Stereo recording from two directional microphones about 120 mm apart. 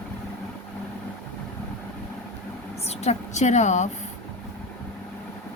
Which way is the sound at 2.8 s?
65° left (ahead or behind).